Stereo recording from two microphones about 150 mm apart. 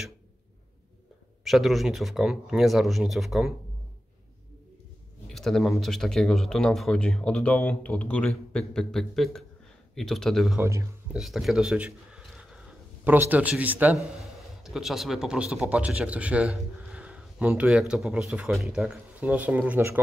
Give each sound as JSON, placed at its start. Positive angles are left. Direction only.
{"t": 1.4, "sound": "speech", "side_deg": 0}
{"t": 5.3, "sound": "speech", "side_deg": 0}
{"t": 10.6, "sound": "speech", "side_deg": -20}
{"t": 11.1, "sound": "speech", "side_deg": 0}